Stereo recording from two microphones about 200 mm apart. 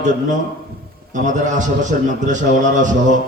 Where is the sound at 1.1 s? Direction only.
40° right (ahead or behind).